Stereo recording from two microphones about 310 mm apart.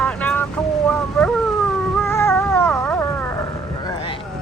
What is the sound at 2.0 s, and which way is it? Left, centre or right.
Cat, centre.